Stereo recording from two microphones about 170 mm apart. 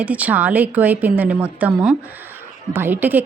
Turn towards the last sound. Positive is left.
turn(degrees=-10)  # may be behind; listen again after turning